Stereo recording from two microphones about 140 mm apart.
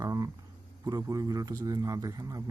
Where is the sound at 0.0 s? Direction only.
25° right (ahead or behind).